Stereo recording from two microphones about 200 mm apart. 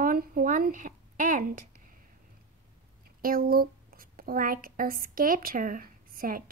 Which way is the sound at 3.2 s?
45° right (ahead or behind).